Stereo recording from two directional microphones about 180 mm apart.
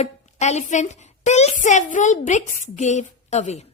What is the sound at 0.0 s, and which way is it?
A woman's voice, 40° left (ahead or behind).